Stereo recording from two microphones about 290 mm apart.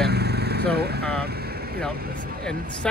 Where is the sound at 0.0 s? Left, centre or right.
Right.